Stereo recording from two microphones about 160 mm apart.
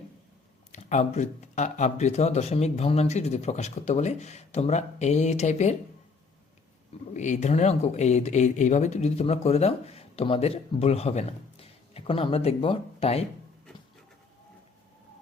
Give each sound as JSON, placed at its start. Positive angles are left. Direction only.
{"t": 0.7, "sound": "speech", "side_deg": 45}
{"t": 7.1, "sound": "speech", "side_deg": 50}